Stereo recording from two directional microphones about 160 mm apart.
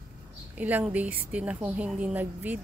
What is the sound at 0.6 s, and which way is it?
A woman's voice, 10° right (ahead or behind).